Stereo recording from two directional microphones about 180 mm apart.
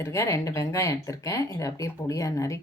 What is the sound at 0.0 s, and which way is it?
Speech, 15° left (ahead or behind).